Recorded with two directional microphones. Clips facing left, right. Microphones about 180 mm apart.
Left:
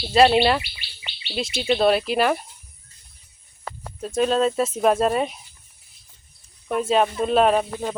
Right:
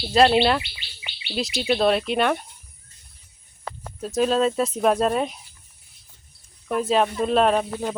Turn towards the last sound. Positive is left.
turn(degrees=0)  # may be behind; listen again after turning